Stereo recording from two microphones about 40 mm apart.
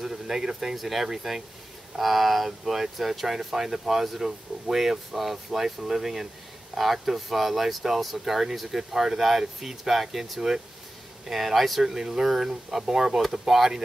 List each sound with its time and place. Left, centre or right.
0.0 s speech: centre